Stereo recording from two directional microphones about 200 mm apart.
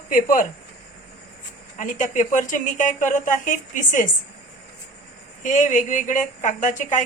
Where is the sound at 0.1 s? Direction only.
40° left (ahead or behind).